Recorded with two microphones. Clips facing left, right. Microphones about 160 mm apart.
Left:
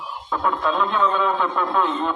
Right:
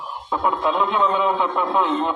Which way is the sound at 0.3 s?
20° right (ahead or behind).